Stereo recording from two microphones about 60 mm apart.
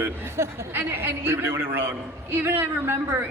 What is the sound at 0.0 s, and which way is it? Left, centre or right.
A man's voice, right.